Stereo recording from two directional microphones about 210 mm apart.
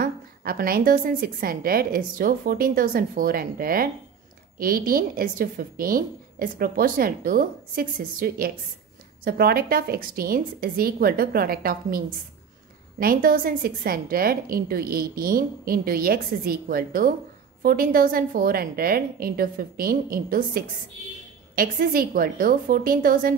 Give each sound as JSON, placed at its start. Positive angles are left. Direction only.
{"t": 0.0, "sound": "a woman's voice", "side_deg": -45}
{"t": 13.0, "sound": "a woman's voice", "side_deg": -45}